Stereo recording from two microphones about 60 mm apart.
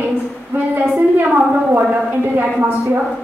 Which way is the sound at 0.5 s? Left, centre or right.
Right.